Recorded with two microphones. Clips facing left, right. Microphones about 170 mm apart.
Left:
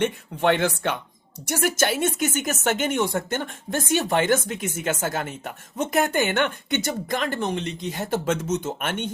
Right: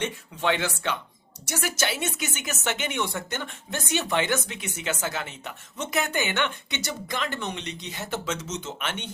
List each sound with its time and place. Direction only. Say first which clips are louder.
0.0 s speech: left 6 dB; 55° left (ahead or behind)